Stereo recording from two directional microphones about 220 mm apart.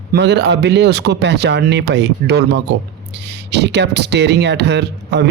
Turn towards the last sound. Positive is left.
turn(degrees=-50)  # may be behind; listen again after turning